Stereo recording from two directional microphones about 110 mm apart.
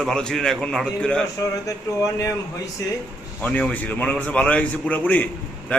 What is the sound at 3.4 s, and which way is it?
A man's voice, 10° left (ahead or behind).